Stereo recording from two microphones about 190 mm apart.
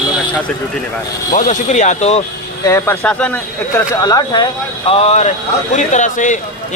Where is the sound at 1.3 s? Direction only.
40° left (ahead or behind).